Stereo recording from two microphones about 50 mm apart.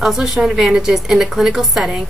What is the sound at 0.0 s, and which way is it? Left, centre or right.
A woman's voice, centre.